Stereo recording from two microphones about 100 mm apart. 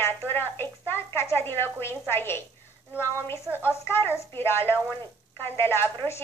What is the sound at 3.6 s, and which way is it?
A woman's voice, 25° left (ahead or behind).